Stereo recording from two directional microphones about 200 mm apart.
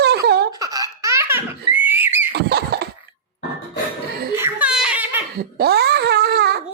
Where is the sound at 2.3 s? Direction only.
55° right (ahead or behind).